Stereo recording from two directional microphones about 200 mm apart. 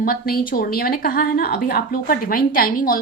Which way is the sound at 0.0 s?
50° left (ahead or behind).